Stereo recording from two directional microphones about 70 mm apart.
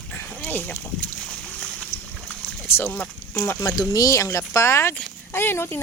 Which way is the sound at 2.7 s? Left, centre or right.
Left.